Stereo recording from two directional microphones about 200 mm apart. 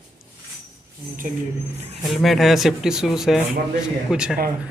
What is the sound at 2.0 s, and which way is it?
Speech, centre (ahead or behind).